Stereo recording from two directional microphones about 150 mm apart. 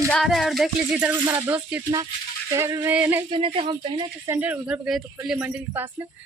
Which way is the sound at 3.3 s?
35° right (ahead or behind).